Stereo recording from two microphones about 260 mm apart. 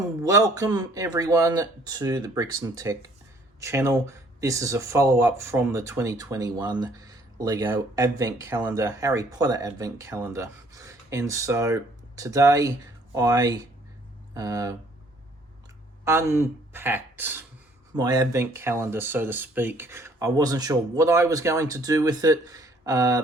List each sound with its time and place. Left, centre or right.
0.2 s speech: centre
16.0 s speech: centre